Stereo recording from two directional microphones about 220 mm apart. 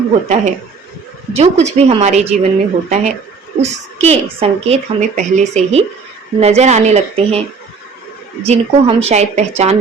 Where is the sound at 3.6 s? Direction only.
30° right (ahead or behind).